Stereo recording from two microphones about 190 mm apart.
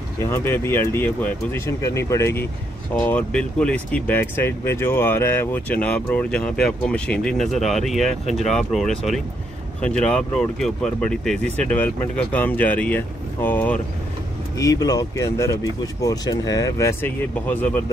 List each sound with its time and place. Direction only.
0.3 s speech: 10° left (ahead or behind)